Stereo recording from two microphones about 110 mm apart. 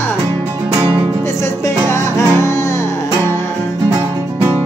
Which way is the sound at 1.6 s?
25° left (ahead or behind).